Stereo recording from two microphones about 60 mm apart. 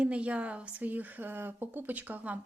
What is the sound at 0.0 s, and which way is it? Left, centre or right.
Speech, right.